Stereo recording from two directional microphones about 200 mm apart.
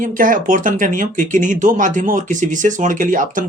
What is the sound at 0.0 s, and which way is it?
Speech, 40° right (ahead or behind).